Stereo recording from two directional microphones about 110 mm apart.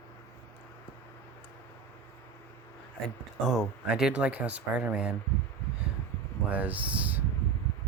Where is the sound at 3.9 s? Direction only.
10° right (ahead or behind).